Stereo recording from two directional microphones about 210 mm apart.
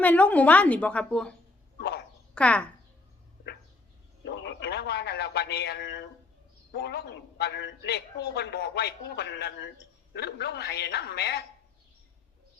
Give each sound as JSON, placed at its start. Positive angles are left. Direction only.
{"t": 0.0, "sound": "a woman's voice", "side_deg": 5}
{"t": 1.8, "sound": "a sound", "side_deg": 50}
{"t": 2.3, "sound": "a child's voice", "side_deg": 5}
{"t": 4.3, "sound": "a man's voice", "side_deg": 55}